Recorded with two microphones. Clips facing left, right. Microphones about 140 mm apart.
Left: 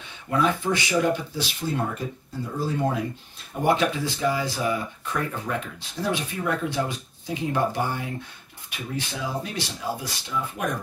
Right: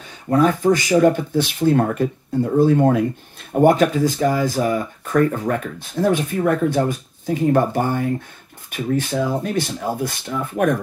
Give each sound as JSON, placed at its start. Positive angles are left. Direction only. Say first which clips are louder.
{"t": 0.0, "sound": "speech", "louder": "right 7 dB", "side_deg": -40}